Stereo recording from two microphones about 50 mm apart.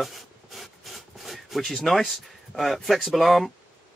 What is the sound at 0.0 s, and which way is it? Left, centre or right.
Rub, centre.